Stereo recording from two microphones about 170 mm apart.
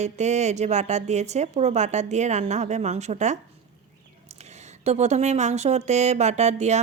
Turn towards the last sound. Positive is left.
turn(degrees=-40)  # may be behind; listen again after turning